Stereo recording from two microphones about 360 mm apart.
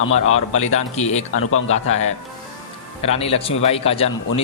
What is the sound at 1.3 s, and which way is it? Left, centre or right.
Speech, left.